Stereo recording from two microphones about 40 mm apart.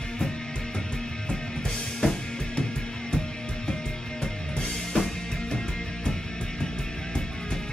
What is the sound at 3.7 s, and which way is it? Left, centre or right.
Music, centre.